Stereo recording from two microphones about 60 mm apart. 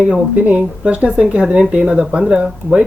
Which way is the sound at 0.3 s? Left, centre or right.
Right.